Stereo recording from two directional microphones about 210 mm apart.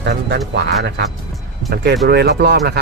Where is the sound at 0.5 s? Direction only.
50° right (ahead or behind).